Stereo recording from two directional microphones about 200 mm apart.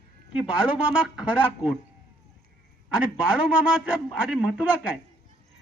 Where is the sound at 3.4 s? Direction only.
5° right (ahead or behind).